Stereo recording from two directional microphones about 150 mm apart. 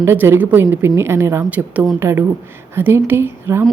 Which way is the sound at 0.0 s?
15° right (ahead or behind).